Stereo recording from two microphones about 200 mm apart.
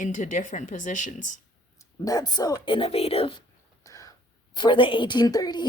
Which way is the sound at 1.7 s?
15° left (ahead or behind).